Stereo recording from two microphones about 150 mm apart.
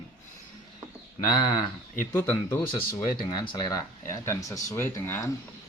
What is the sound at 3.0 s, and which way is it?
Speech, 30° left (ahead or behind).